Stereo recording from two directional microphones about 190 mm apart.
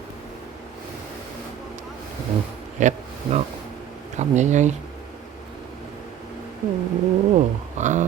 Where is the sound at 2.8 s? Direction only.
40° right (ahead or behind).